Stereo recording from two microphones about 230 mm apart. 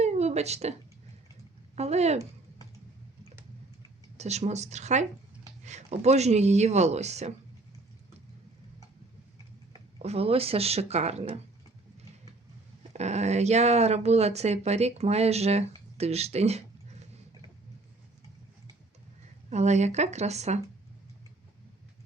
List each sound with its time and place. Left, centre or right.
0.0 s a sound: right
1.7 s speech: right
4.2 s speech: right
10.0 s speech: right
12.9 s speech: right
19.5 s speech: right